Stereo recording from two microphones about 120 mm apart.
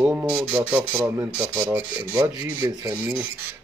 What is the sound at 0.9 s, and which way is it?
Speech, 25° right (ahead or behind).